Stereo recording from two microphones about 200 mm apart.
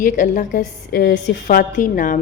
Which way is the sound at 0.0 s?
40° left (ahead or behind).